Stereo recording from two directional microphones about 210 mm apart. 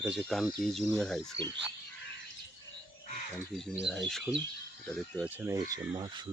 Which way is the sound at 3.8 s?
Centre (ahead or behind).